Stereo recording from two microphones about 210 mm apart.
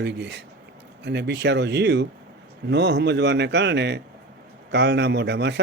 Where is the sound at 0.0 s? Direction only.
55° right (ahead or behind).